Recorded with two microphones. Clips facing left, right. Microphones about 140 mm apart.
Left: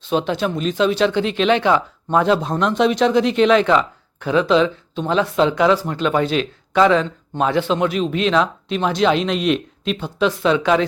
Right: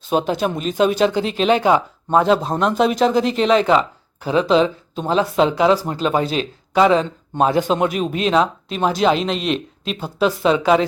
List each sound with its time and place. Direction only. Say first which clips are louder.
0.0 s speech: right 1 dB; 45° right (ahead or behind)
2.1 s speech: right 1 dB; centre (ahead or behind)
3.4 s speech: even; 35° right (ahead or behind)
8.9 s speech: even; 5° right (ahead or behind)
10.0 s speech: right 1 dB; 40° right (ahead or behind)
10.6 s speech: right 3 dB; 5° right (ahead or behind)